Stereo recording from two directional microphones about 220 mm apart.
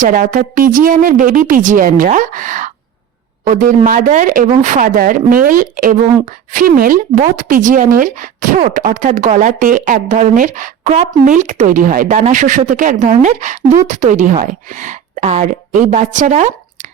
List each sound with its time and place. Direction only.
0.0 s speech: 40° right (ahead or behind)